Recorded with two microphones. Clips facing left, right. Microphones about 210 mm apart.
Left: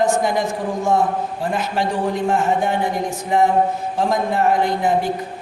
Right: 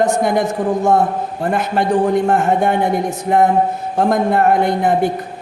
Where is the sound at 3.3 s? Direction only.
55° right (ahead or behind).